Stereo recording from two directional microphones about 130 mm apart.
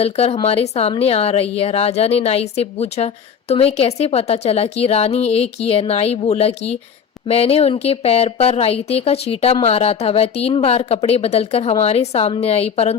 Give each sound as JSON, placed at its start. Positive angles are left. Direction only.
{"t": 0.0, "sound": "a woman's voice", "side_deg": 50}